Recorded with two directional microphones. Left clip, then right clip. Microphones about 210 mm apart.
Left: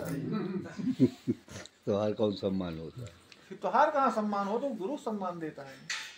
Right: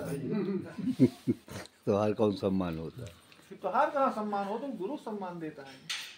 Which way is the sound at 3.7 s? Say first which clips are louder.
Left 2 dB; 60° left (ahead or behind).